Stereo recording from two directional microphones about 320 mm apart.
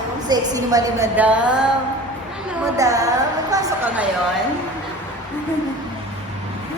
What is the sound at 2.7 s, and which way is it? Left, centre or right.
A woman's voice, centre.